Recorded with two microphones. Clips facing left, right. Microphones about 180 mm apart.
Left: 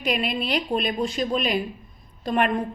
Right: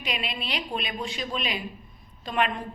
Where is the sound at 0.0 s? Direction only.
45° left (ahead or behind).